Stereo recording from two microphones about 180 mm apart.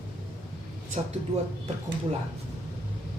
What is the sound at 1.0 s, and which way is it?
Speech, 35° right (ahead or behind).